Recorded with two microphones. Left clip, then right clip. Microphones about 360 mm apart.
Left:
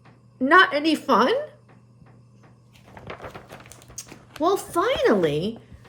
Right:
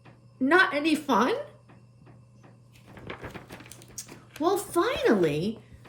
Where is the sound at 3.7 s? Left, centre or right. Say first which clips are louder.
Left 3 dB; centre.